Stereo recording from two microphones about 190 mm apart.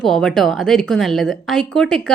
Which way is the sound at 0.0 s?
5° left (ahead or behind).